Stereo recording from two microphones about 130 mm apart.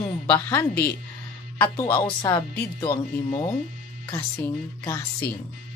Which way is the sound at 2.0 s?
40° left (ahead or behind).